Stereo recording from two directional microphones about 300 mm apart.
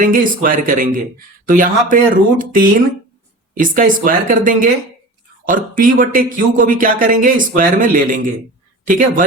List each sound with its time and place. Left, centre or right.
0.0 s speech: right